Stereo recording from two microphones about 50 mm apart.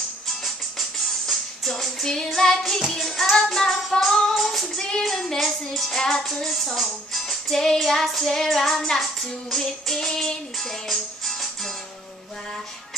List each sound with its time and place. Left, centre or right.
0.4 s music: centre
4.7 s music: centre